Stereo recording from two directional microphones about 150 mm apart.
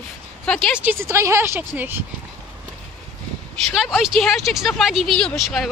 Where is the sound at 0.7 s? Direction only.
15° right (ahead or behind).